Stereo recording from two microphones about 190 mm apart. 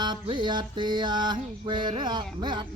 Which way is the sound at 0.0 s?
25° right (ahead or behind).